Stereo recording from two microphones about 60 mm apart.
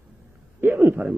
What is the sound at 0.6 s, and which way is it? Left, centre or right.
Speech, right.